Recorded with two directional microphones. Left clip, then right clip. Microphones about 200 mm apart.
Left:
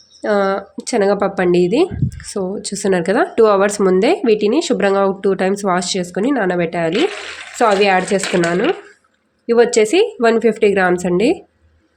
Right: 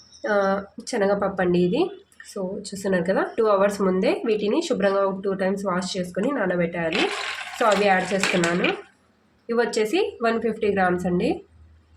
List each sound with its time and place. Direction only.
0.2 s speech: 40° left (ahead or behind)